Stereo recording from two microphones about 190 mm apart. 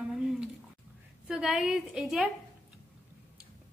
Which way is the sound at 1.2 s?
Centre (ahead or behind).